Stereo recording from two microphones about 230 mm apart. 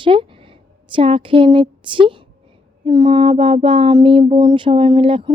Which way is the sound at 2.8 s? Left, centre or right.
Centre.